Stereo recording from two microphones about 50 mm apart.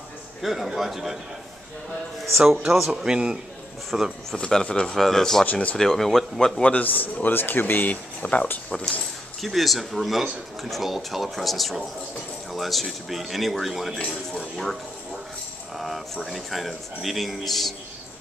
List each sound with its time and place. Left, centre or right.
0.4 s speech: centre
2.7 s a man's voice: centre
4.3 s speech: centre
5.4 s speech: left
5.8 s speech: centre
6.6 s speech: left
8.6 s speech: centre
9.4 s speech: centre
15.8 s speech: centre